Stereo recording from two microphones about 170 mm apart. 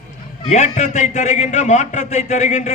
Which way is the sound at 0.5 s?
45° left (ahead or behind).